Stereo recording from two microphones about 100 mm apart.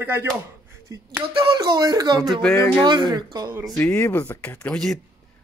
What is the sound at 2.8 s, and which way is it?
Speech, 45° right (ahead or behind).